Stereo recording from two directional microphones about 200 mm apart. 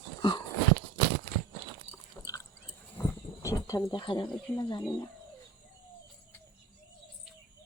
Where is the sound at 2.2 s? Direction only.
15° left (ahead or behind).